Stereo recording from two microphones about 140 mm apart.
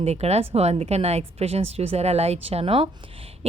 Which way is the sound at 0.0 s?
50° right (ahead or behind).